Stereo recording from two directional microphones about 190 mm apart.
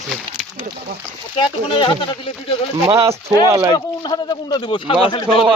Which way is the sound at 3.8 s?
20° left (ahead or behind).